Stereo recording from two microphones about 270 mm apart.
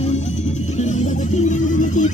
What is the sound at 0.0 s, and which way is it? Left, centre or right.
Music, left.